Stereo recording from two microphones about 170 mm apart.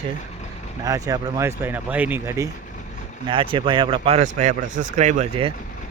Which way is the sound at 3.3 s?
30° right (ahead or behind).